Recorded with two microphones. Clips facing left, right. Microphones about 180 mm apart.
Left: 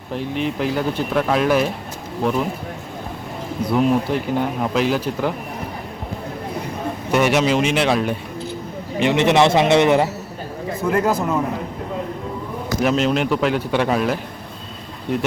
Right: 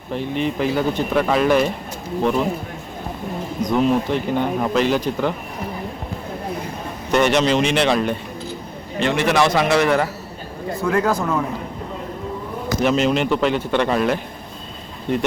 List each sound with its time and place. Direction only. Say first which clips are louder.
0.1 s speech: right 1 dB; centre (ahead or behind)
3.6 s speech: even; 5° left (ahead or behind)
7.1 s speech: right 1 dB; 5° left (ahead or behind)
9.0 s a man's voice: left 3 dB; 20° left (ahead or behind)
10.8 s speech: even; 5° left (ahead or behind)
12.8 s speech: even; centre (ahead or behind)